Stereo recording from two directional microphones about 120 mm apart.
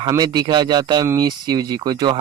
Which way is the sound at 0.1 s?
35° right (ahead or behind).